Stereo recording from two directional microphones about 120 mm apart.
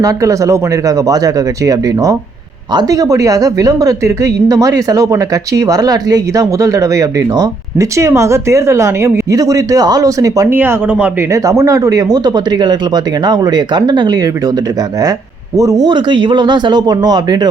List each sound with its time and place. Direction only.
0.0 s a woman's voice: 25° right (ahead or behind)
10.5 s speech: 15° right (ahead or behind)
11.3 s speech: 30° right (ahead or behind)
15.5 s speech: 30° right (ahead or behind)